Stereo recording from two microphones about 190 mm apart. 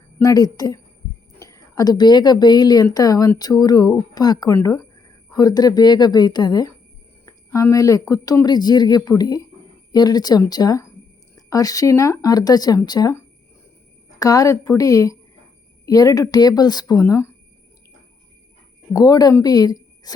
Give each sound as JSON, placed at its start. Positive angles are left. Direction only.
{"t": 0.2, "sound": "a woman's voice", "side_deg": 20}
{"t": 18.9, "sound": "speech", "side_deg": 20}